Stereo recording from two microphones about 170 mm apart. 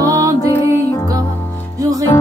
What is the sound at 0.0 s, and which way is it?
Music, 20° right (ahead or behind).